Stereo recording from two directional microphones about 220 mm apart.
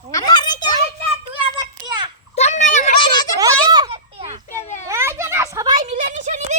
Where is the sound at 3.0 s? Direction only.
20° left (ahead or behind).